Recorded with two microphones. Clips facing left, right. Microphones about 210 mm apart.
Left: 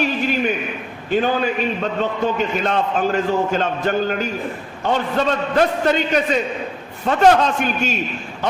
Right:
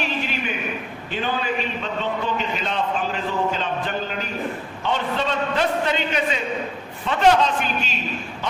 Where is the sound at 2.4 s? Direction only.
45° left (ahead or behind).